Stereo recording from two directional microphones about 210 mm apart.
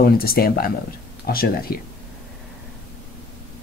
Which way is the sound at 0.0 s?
45° left (ahead or behind).